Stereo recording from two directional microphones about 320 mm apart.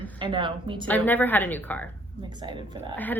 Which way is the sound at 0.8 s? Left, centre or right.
Centre.